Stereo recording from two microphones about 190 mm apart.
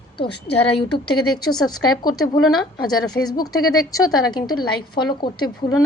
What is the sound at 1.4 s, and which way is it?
A woman's voice, 20° left (ahead or behind).